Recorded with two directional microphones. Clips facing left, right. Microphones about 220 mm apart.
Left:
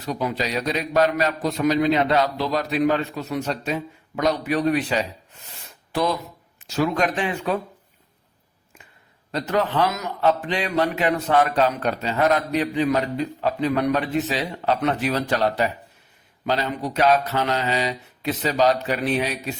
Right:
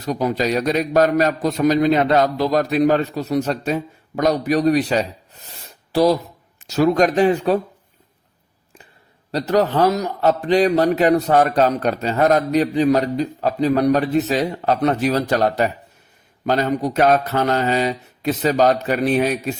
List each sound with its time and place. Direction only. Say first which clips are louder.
0.0 s a man's voice: right 5 dB; 40° right (ahead or behind)
5.3 s a sound: right 3 dB; 35° right (ahead or behind)
5.9 s a man's voice: right 7 dB; 35° right (ahead or behind)
9.3 s a man's voice: right 5 dB; 40° right (ahead or behind)